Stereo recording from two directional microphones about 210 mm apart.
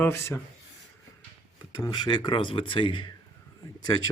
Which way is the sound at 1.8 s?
20° left (ahead or behind).